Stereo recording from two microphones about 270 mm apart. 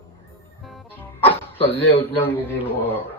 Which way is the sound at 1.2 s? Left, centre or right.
Left.